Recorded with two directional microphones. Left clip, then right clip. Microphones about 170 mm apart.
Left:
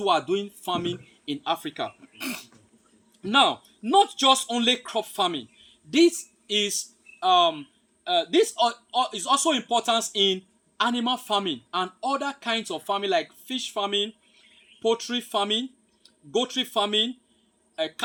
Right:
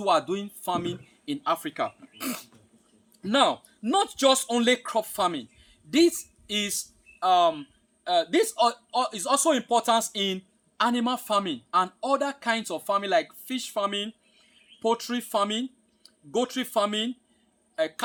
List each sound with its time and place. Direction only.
0.0 s speech: 20° right (ahead or behind)